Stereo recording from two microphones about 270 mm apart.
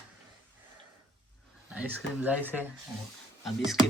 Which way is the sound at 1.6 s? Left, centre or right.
Centre.